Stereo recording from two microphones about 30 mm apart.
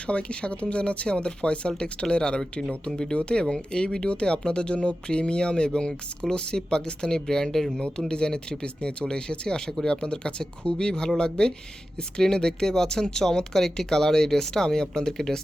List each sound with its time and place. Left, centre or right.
0.1 s speech: left; by 15.4 s centre